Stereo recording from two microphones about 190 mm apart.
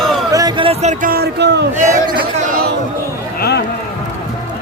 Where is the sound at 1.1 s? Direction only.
60° right (ahead or behind).